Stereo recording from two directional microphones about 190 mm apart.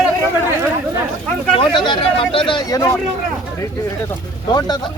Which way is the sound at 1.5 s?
25° left (ahead or behind).